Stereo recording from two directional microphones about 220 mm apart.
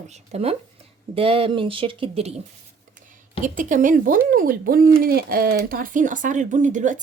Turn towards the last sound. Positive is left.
turn(degrees=-35)  # may be behind; listen again after turning